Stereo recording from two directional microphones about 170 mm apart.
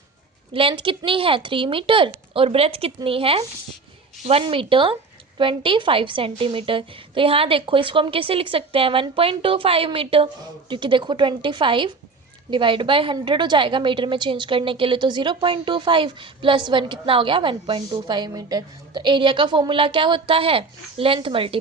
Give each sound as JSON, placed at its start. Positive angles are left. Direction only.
{"t": 0.5, "sound": "a woman's voice", "side_deg": -30}